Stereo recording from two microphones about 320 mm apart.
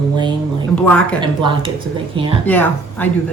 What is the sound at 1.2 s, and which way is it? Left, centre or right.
Speech, centre.